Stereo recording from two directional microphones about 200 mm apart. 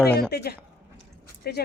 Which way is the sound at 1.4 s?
50° left (ahead or behind).